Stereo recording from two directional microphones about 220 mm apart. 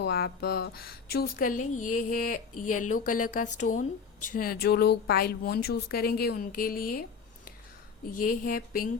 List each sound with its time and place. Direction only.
0.0 s a woman's voice: 45° left (ahead or behind)
8.2 s speech: 40° left (ahead or behind)